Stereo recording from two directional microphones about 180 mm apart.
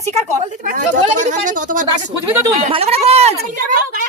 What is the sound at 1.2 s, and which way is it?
Speech, 45° right (ahead or behind).